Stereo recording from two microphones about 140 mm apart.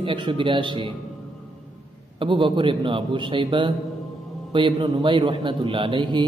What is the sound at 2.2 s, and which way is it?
A man's voice, 35° right (ahead or behind).